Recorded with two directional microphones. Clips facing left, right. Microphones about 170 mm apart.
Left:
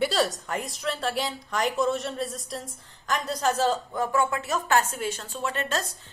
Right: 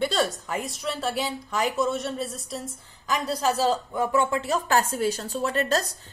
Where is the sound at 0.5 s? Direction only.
Centre (ahead or behind).